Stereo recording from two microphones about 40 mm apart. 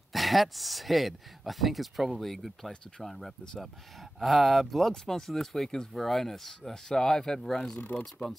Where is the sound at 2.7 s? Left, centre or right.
Centre.